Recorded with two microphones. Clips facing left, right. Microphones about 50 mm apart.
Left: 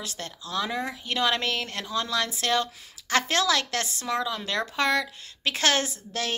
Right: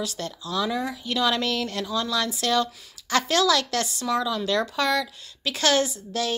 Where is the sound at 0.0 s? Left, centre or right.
Left.